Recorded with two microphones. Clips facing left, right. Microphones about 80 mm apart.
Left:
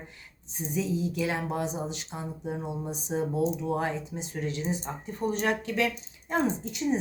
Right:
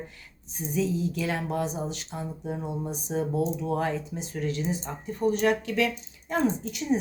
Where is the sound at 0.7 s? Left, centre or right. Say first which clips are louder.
Right 2 dB; centre.